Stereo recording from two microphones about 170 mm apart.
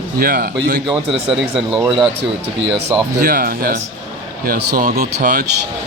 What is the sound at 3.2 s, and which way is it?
Speech, 60° right (ahead or behind).